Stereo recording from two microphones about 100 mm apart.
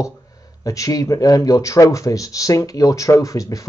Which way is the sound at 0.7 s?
35° left (ahead or behind).